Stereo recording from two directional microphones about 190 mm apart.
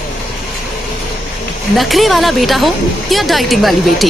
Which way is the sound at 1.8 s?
Centre (ahead or behind).